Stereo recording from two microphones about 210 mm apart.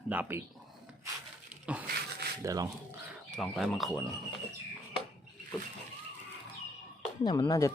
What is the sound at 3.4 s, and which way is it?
Speech, centre (ahead or behind).